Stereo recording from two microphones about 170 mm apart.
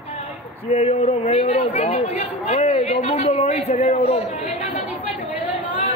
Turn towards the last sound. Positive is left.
turn(degrees=-10)  # may be behind; listen again after turning